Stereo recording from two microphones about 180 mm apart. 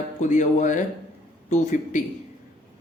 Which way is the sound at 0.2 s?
45° left (ahead or behind).